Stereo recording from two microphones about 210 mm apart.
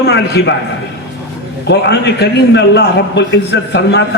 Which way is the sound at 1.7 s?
55° left (ahead or behind).